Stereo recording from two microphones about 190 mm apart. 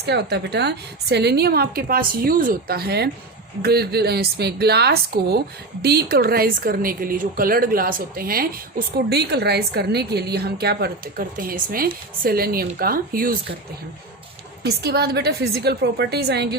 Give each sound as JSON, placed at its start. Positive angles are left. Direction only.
{"t": 0.0, "sound": "a woman's voice", "side_deg": -60}
{"t": 14.6, "sound": "a woman's voice", "side_deg": -60}